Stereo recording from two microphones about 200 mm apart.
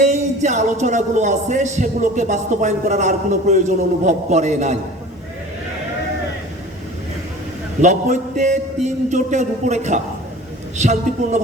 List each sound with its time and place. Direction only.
0.0 s speech: 35° right (ahead or behind)
7.8 s speech: 35° right (ahead or behind)